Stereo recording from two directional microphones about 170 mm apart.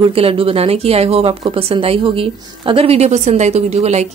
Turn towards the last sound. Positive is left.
turn(degrees=-40)  # may be behind; listen again after turning